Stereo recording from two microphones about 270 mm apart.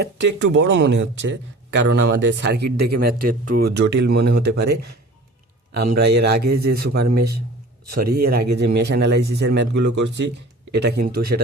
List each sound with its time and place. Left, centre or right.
0.3 s speech: right